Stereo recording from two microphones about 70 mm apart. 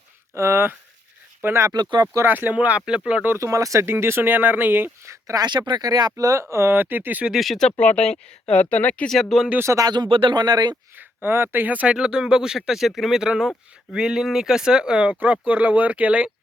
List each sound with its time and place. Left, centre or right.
0.3 s speech: right
1.7 s speech: right
2.2 s speech: right
3.3 s speech: right
3.9 s speech: right
5.3 s speech: right
6.4 s speech: right
7.3 s speech: centre
7.8 s speech: centre
9.3 s speech: centre
9.7 s speech: right
10.9 s speech: right; by 15.1 s centre
15.2 s speech: right